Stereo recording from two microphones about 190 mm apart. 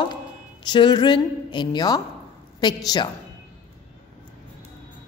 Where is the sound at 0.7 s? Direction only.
25° left (ahead or behind).